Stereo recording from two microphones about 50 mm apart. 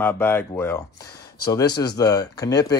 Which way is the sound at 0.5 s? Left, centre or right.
Left.